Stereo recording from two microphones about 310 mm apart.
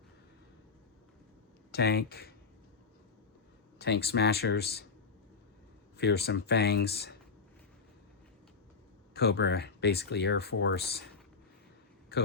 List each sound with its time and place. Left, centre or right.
1.7 s speech: left
3.8 s speech: left
6.0 s speech: left
9.1 s speech: left
12.1 s a man's voice: left